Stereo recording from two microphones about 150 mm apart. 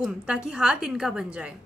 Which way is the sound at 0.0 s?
5° right (ahead or behind).